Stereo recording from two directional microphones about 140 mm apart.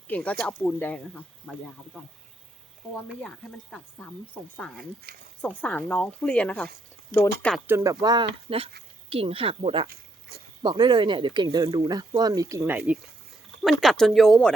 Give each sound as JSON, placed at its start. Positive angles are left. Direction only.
{"t": 0.1, "sound": "speech", "side_deg": 10}
{"t": 5.1, "sound": "speech", "side_deg": -90}
{"t": 5.5, "sound": "speech", "side_deg": 10}
{"t": 7.7, "sound": "speech", "side_deg": -15}
{"t": 8.0, "sound": "speech", "side_deg": -30}
{"t": 8.4, "sound": "speech", "side_deg": -45}
{"t": 13.6, "sound": "speech", "side_deg": 0}